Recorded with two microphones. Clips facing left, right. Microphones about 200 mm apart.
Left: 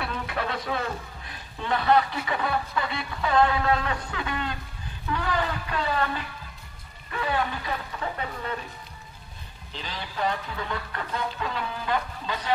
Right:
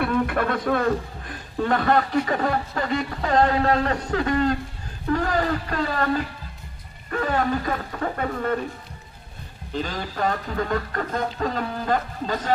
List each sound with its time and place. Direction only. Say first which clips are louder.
0.0 s a man's voice: right 9 dB; 50° right (ahead or behind)
9.7 s a man's voice: right 9 dB; 45° right (ahead or behind)